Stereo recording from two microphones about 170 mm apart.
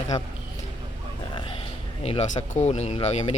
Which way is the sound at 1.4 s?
30° left (ahead or behind).